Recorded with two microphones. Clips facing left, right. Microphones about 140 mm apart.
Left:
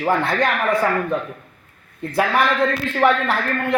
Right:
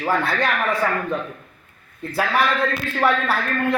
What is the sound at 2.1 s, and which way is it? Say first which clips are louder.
Speech: left 2 dB; 15° left (ahead or behind).